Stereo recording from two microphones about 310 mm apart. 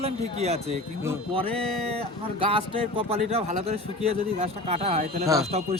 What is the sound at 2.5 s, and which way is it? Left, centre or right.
A man's voice, centre.